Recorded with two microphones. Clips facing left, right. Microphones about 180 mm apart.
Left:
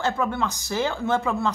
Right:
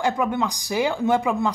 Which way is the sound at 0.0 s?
15° right (ahead or behind).